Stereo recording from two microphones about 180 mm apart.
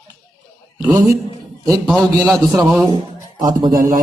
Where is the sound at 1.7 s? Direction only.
5° left (ahead or behind).